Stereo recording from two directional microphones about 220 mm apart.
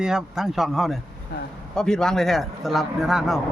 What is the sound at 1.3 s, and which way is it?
Speech, 50° left (ahead or behind).